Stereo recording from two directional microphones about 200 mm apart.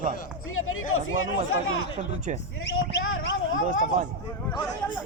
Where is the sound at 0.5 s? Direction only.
90° left.